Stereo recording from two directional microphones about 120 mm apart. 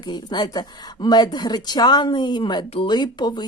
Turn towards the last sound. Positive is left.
turn(degrees=35)  # may be behind; listen again after turning